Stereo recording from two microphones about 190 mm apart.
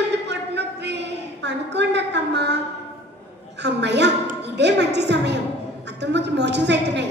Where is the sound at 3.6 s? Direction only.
65° right (ahead or behind).